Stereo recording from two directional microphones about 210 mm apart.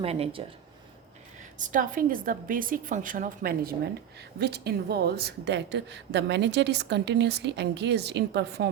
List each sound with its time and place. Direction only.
0.0 s speech: 30° right (ahead or behind)
1.5 s a woman's voice: 40° right (ahead or behind)